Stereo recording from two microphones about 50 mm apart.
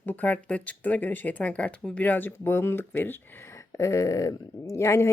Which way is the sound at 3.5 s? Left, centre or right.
Left.